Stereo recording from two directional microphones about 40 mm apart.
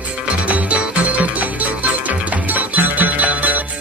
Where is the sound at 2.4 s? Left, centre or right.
Right.